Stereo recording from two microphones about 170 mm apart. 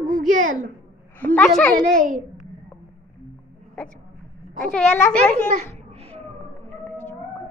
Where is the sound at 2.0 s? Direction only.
50° right (ahead or behind).